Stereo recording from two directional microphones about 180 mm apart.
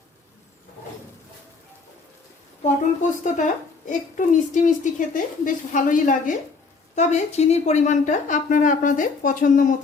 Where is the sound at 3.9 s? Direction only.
45° left (ahead or behind).